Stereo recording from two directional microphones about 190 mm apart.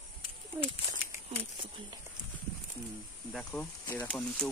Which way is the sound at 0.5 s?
10° right (ahead or behind).